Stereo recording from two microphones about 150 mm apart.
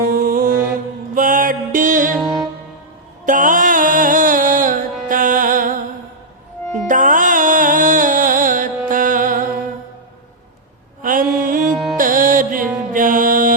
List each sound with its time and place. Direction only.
0.0 s music: 70° right (ahead or behind)
2.1 s music: centre (ahead or behind)
3.2 s music: 65° right (ahead or behind)
6.8 s music: 60° right (ahead or behind)
11.0 s mantra: 65° right (ahead or behind)
11.9 s music: 65° right (ahead or behind)